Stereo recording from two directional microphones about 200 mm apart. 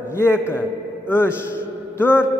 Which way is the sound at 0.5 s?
10° left (ahead or behind).